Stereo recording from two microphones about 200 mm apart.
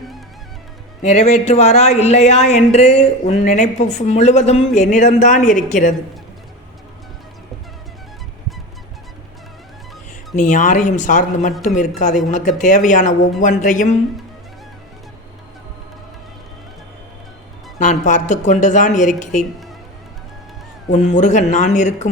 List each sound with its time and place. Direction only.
1.0 s speech: 35° left (ahead or behind)
10.3 s speech: 40° left (ahead or behind)
17.8 s speech: 40° left (ahead or behind)
20.9 s speech: 35° left (ahead or behind)